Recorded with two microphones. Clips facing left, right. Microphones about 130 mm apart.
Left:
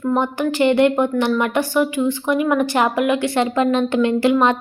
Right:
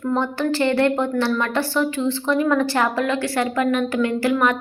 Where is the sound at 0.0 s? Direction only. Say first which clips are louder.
Left 2 dB; 15° left (ahead or behind).